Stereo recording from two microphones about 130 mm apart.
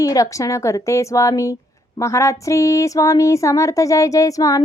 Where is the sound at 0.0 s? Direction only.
25° left (ahead or behind).